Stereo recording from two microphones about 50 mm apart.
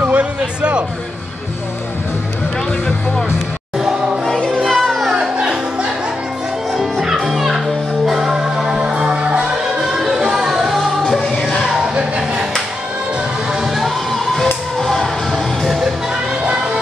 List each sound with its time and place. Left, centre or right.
0.0 s music: right
4.5 s music: centre
5.1 s music: centre
11.8 s music: centre
13.7 s music: centre
16.4 s music: right